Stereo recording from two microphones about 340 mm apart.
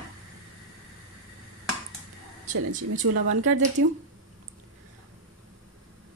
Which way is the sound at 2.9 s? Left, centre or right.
Right.